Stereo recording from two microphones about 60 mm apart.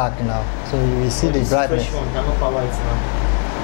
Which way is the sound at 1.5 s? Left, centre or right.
Left.